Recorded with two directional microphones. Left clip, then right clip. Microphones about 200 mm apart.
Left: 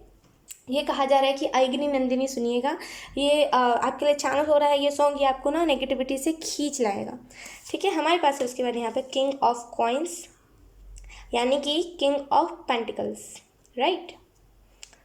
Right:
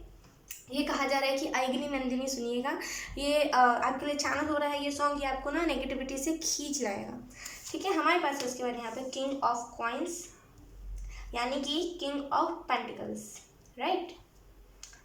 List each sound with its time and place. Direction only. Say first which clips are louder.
0.7 s a woman's voice: left 8 dB; 40° left (ahead or behind)
7.3 s a woman's voice: left 6 dB; 50° left (ahead or behind)
11.1 s a woman's voice: left 10 dB; 50° left (ahead or behind)
13.3 s a sound: left 13 dB; 50° left (ahead or behind)